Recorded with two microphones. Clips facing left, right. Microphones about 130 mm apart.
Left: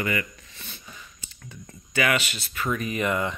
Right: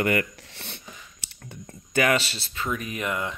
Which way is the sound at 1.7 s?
40° right (ahead or behind).